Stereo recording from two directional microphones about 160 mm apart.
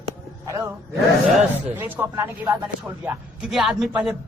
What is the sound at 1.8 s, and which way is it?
Speech, 15° right (ahead or behind).